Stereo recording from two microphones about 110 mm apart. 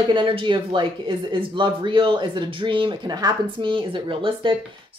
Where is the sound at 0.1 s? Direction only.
50° right (ahead or behind).